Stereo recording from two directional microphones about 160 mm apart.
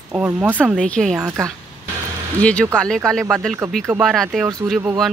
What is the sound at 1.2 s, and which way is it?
Speech, 20° right (ahead or behind).